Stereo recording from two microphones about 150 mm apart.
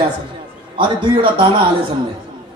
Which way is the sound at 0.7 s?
30° right (ahead or behind).